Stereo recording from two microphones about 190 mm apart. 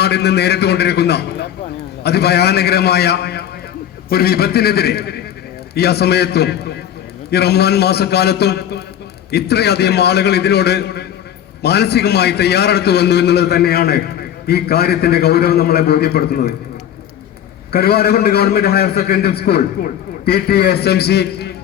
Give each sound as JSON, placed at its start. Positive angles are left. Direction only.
{"t": 0.0, "sound": "a man's voice", "side_deg": 60}
{"t": 17.7, "sound": "a man's voice", "side_deg": 55}